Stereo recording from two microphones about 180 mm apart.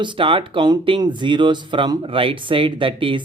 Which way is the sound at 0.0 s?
25° right (ahead or behind).